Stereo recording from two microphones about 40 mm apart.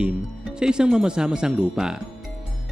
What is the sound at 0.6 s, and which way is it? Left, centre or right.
Speech, right.